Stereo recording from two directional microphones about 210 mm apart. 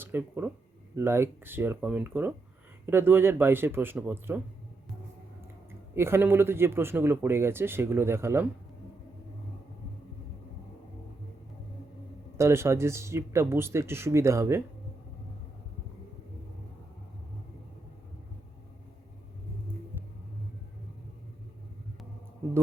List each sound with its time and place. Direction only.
0.0 s speech: 10° right (ahead or behind)
5.9 s speech: 10° right (ahead or behind)
12.4 s speech: 15° right (ahead or behind)